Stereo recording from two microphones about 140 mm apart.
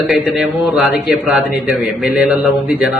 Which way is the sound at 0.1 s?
5° right (ahead or behind).